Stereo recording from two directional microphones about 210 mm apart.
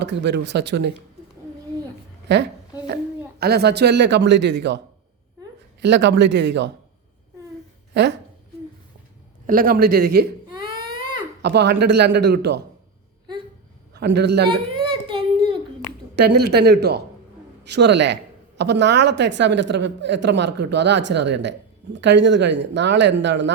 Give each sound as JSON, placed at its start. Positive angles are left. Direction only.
{"t": 0.0, "sound": "speech", "side_deg": -55}
{"t": 2.3, "sound": "a woman's voice", "side_deg": -55}
{"t": 5.8, "sound": "speech", "side_deg": -55}
{"t": 9.5, "sound": "a man's voice", "side_deg": -40}
{"t": 11.4, "sound": "a man's voice", "side_deg": -50}
{"t": 13.9, "sound": "a man's voice", "side_deg": -50}
{"t": 14.4, "sound": "baby cry", "side_deg": -25}
{"t": 16.1, "sound": "a man's voice", "side_deg": -50}